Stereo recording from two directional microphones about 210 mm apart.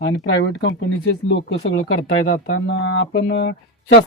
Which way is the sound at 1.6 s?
75° left (ahead or behind).